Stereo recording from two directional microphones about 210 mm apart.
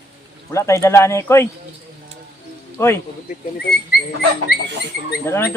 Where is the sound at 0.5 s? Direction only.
15° left (ahead or behind).